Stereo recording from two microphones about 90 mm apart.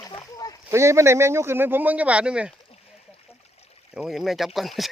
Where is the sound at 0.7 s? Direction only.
30° right (ahead or behind); by 2.5 s 10° right (ahead or behind).